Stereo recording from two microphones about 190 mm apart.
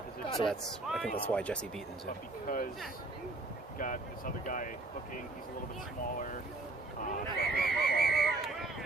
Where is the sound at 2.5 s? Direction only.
45° left (ahead or behind).